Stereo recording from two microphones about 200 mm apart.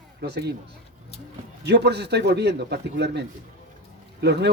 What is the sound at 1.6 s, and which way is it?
Speech, 55° right (ahead or behind).